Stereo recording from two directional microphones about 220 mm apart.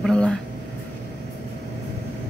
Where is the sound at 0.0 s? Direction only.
5° left (ahead or behind).